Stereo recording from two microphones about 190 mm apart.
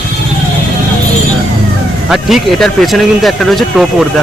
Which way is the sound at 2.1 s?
Centre (ahead or behind).